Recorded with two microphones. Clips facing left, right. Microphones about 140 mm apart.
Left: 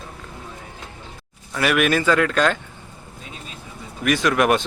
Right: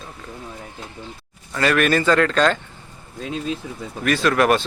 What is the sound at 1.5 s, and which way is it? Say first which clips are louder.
Speech: right 1 dB; 10° left (ahead or behind).